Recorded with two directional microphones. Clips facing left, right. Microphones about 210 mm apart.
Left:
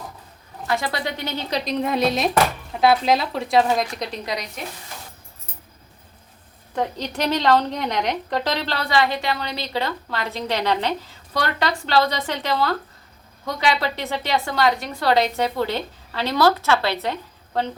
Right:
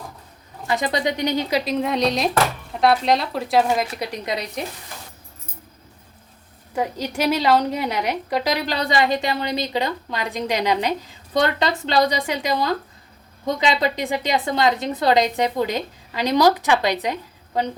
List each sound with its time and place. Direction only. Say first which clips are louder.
0.7 s a woman's voice: right 3 dB; 20° right (ahead or behind)
6.7 s a woman's voice: right 1 dB; 10° right (ahead or behind)